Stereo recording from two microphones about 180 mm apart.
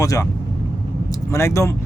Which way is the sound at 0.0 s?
20° left (ahead or behind).